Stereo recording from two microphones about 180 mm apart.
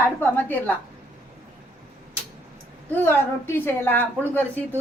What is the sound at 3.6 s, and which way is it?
Speech, 10° left (ahead or behind).